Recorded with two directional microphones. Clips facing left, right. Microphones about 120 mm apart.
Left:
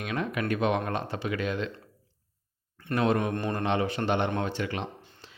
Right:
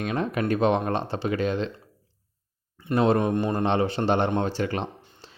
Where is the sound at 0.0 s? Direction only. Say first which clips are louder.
Right 4 dB; 35° right (ahead or behind).